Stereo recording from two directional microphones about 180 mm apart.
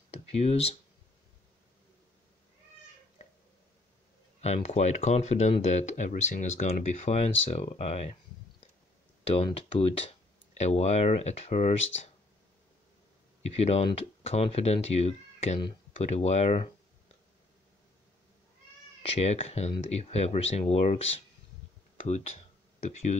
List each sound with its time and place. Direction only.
0.1 s speech: 35° left (ahead or behind)
3.2 s a sound: 40° left (ahead or behind)
4.4 s speech: 35° left (ahead or behind)
9.2 s speech: 30° left (ahead or behind)
13.4 s speech: 35° left (ahead or behind)
19.0 s speech: 35° left (ahead or behind)
21.9 s a sound: 40° left (ahead or behind)